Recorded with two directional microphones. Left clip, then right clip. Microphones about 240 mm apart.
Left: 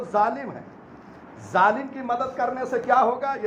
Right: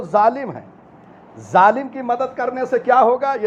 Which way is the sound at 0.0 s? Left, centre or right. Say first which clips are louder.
Right 7 dB; right.